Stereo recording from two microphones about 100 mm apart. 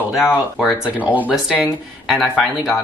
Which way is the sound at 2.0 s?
Centre (ahead or behind).